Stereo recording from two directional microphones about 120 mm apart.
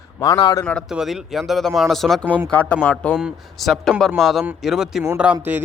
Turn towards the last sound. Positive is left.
turn(degrees=-10)  # may be behind; listen again after turning